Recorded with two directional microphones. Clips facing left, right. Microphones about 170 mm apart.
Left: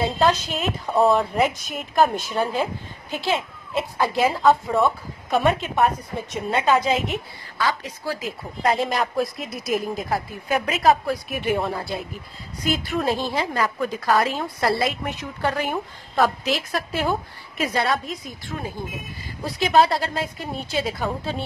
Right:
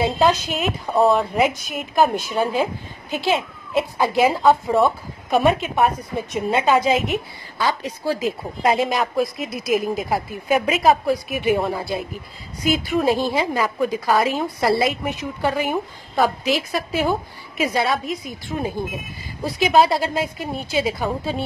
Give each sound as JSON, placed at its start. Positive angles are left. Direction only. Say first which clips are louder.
{"t": 0.2, "sound": "a woman's voice", "louder": "even", "side_deg": -10}
{"t": 0.9, "sound": "a woman's voice", "louder": "right 1 dB", "side_deg": 0}
{"t": 6.5, "sound": "a woman's voice", "louder": "right 2 dB", "side_deg": -10}
{"t": 7.5, "sound": "a woman's voice", "louder": "right 2 dB", "side_deg": -20}
{"t": 8.7, "sound": "a woman's voice", "louder": "right 3 dB", "side_deg": 0}
{"t": 18.5, "sound": "a woman's voice", "louder": "right 6 dB", "side_deg": -20}
{"t": 19.4, "sound": "a woman's voice", "louder": "right 2 dB", "side_deg": -10}